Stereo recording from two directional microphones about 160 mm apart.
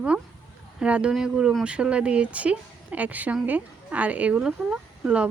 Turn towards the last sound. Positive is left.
turn(degrees=-5)  # may be behind; listen again after turning